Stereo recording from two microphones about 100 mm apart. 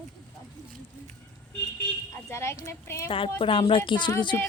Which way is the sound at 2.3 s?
25° left (ahead or behind).